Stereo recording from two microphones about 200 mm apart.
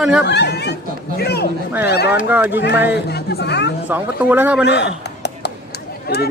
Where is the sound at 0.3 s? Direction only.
55° left (ahead or behind).